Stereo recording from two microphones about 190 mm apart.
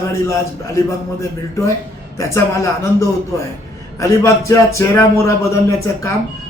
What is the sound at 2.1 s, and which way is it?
Speech, 15° left (ahead or behind).